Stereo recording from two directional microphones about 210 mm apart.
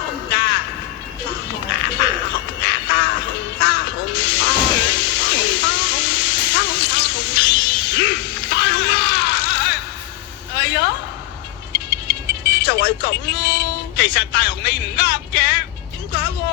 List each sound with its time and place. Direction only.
0.3 s music: 55° left (ahead or behind)
2.6 s music: 55° left (ahead or behind)
10.5 s a sound: 55° left (ahead or behind)
11.7 s music: 55° left (ahead or behind)